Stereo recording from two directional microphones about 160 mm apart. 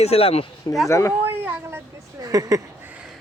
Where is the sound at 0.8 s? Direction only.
20° left (ahead or behind).